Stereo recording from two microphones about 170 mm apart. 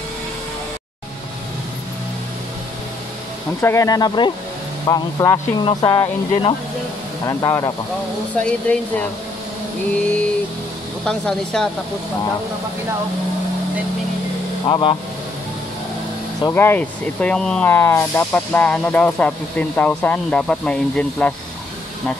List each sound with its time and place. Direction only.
3.6 s speech: 20° left (ahead or behind)
8.4 s speech: 10° left (ahead or behind)
11.1 s speech: 5° left (ahead or behind)
14.7 s speech: 30° left (ahead or behind)
16.4 s speech: 15° left (ahead or behind)